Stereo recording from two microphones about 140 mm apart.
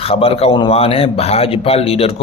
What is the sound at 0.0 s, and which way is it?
Speech, 45° left (ahead or behind).